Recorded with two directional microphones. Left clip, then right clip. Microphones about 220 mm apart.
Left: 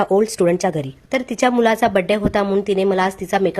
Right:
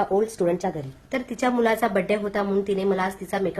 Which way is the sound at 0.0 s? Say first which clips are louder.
Left 6 dB; 50° left (ahead or behind).